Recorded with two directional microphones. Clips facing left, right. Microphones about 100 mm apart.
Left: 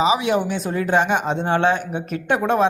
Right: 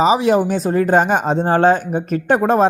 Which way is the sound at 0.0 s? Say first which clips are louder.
Right 5 dB; 40° right (ahead or behind).